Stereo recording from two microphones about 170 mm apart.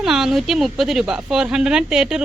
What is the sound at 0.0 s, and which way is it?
Speech, centre (ahead or behind).